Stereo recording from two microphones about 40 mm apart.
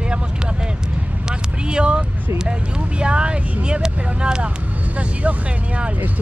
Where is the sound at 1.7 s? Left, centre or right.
Right.